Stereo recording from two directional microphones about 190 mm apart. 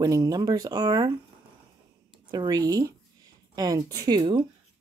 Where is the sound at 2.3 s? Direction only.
20° right (ahead or behind).